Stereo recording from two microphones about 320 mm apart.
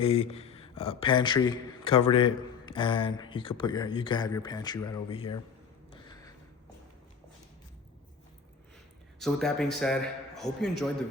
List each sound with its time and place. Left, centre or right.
0.0 s speech: centre
6.1 s a sound: centre
9.1 s a man's voice: centre